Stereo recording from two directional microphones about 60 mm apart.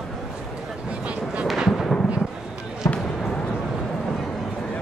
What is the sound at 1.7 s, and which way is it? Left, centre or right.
Artillery fire, centre.